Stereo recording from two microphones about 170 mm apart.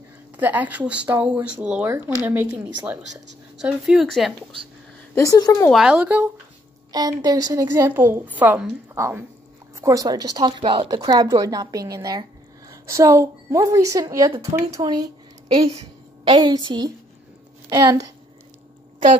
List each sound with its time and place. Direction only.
0.4 s a woman's voice: 10° right (ahead or behind)
3.6 s speech: centre (ahead or behind)
5.1 s speech: 20° left (ahead or behind)
5.7 s a woman's voice: 5° right (ahead or behind)
6.9 s a woman's voice: 20° right (ahead or behind)
16.3 s speech: 25° right (ahead or behind)